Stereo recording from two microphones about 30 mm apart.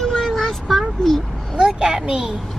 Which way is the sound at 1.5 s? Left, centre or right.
Right.